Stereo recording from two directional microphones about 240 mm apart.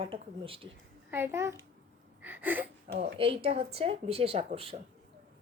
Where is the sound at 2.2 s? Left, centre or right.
Centre.